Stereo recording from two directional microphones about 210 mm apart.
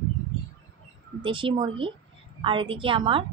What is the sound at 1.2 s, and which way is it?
A woman's voice, 25° right (ahead or behind).